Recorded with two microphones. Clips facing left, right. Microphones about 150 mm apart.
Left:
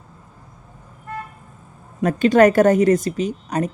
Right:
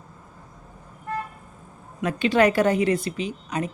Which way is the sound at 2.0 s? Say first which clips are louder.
Left 6 dB; 45° left (ahead or behind).